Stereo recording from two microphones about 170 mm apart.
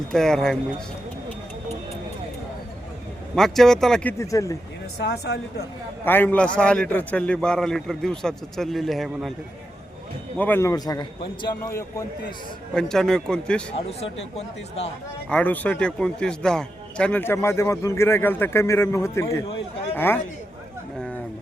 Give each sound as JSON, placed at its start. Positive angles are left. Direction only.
{"t": 0.1, "sound": "a man's voice", "side_deg": 0}
{"t": 3.3, "sound": "a man's voice", "side_deg": 0}
{"t": 4.2, "sound": "speech", "side_deg": 20}
{"t": 5.0, "sound": "speech", "side_deg": 75}
{"t": 6.1, "sound": "a man's voice", "side_deg": 10}
{"t": 10.3, "sound": "a man's voice", "side_deg": 10}
{"t": 12.7, "sound": "a man's voice", "side_deg": 5}
{"t": 13.7, "sound": "speech", "side_deg": 35}
{"t": 15.3, "sound": "a man's voice", "side_deg": 10}